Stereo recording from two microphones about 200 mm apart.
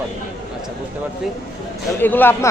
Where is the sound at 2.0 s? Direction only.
10° left (ahead or behind).